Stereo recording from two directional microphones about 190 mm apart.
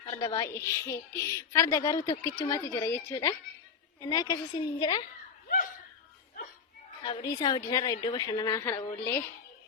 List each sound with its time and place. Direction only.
0.0 s a woman's voice: 25° left (ahead or behind)
7.0 s a woman's voice: 20° left (ahead or behind)